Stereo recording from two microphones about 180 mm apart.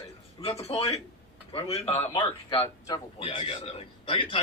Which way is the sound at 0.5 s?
35° left (ahead or behind).